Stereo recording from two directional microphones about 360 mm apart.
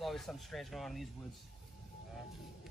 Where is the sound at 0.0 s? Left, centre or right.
Centre.